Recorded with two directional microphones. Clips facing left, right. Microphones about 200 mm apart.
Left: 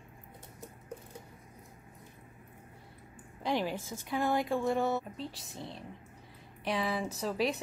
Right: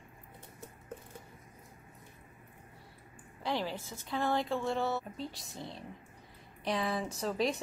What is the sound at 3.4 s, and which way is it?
Speech, 15° left (ahead or behind).